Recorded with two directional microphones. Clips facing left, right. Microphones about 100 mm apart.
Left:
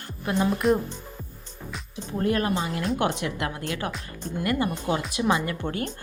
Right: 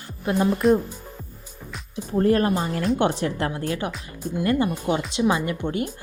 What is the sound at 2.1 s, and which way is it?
Speech, 35° right (ahead or behind).